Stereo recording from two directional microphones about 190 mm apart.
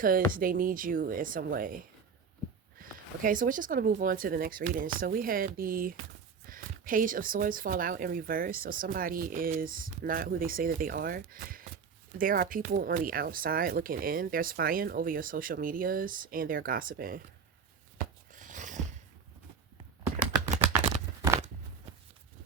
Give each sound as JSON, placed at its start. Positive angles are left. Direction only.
{"t": 0.0, "sound": "speech", "side_deg": -45}
{"t": 17.9, "sound": "a sound", "side_deg": -45}
{"t": 20.7, "sound": "shuffling cards", "side_deg": -35}